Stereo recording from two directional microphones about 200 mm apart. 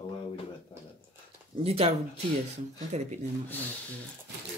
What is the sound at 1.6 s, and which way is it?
Speech, 30° right (ahead or behind).